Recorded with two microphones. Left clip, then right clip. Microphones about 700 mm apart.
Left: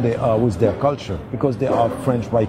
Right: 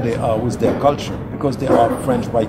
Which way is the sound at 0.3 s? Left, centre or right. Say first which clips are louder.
Even; left.